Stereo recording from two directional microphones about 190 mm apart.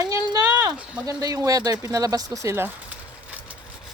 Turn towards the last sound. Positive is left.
turn(degrees=-10)  # may be behind; listen again after turning